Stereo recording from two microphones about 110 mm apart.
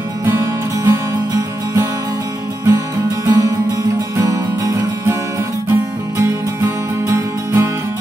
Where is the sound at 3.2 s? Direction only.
30° right (ahead or behind).